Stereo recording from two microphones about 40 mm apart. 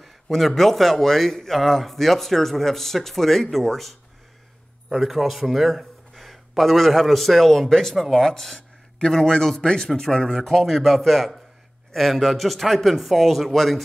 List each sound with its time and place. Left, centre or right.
0.0 s a man's voice: centre; by 9.8 s left
9.8 s a man's voice: centre